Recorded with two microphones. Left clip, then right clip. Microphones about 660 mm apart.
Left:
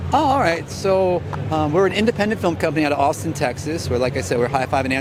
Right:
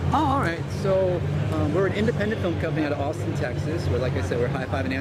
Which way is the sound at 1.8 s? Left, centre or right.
Left.